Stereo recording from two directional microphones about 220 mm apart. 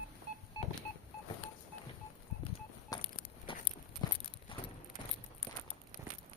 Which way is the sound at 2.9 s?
15° left (ahead or behind).